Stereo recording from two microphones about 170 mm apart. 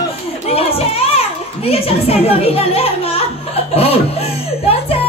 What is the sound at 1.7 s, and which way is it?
A child's voice, 35° left (ahead or behind).